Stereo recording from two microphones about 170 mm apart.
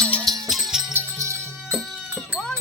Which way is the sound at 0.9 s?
15° right (ahead or behind).